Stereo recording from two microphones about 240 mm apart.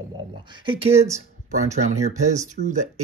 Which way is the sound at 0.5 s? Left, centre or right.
Centre.